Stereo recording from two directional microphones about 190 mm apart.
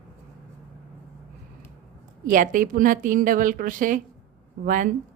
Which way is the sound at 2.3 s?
45° right (ahead or behind).